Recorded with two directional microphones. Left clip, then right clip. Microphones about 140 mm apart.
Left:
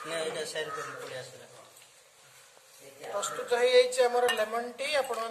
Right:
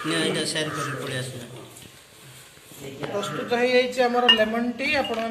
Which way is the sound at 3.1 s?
15° left (ahead or behind).